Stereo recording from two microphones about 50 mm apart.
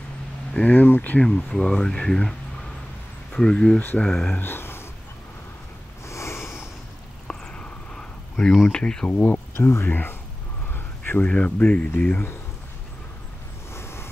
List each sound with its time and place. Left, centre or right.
0.5 s speech: left
1.2 s speech: centre
3.3 s speech: centre
4.4 s a sound: left
6.0 s a sound: left
7.2 s a sound: centre
8.6 s speech: centre
9.1 s speech: left
9.6 s speech: left
10.7 s a sound: left
11.2 s speech: left
13.7 s vehicle: left